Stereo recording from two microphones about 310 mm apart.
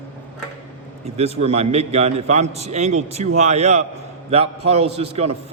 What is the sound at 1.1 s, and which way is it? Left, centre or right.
A man's voice, centre.